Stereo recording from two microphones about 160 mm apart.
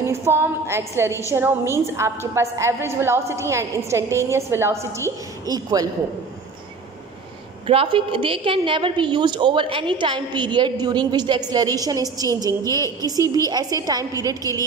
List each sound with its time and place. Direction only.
0.0 s a woman's voice: 15° right (ahead or behind)
7.6 s a woman's voice: 35° right (ahead or behind)